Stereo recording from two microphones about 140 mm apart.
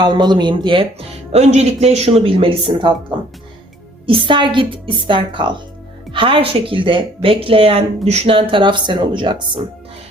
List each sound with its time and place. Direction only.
0.0 s speech: 30° right (ahead or behind)
4.0 s speech: 35° right (ahead or behind)